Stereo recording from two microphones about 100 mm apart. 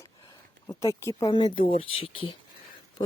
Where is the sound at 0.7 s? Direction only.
30° left (ahead or behind).